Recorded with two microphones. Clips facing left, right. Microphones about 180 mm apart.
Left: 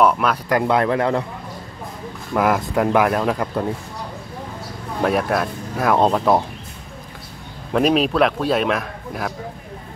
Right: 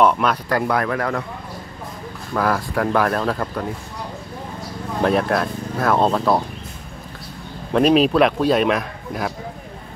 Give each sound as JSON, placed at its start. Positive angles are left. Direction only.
{"t": 0.0, "sound": "a man's voice", "side_deg": 5}
{"t": 0.5, "sound": "speech", "side_deg": 20}
{"t": 2.3, "sound": "speech", "side_deg": 20}
{"t": 5.0, "sound": "speech", "side_deg": 5}
{"t": 7.7, "sound": "a man's voice", "side_deg": 0}